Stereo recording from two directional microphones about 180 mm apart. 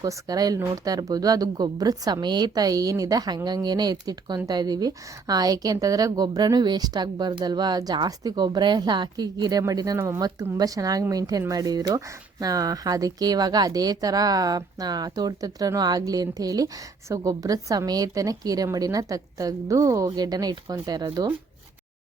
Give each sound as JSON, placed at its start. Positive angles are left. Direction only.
{"t": 0.0, "sound": "speech", "side_deg": -20}